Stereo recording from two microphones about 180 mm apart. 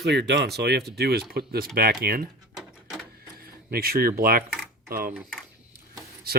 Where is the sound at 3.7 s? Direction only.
55° right (ahead or behind).